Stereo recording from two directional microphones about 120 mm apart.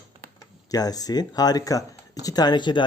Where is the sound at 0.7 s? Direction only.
30° left (ahead or behind).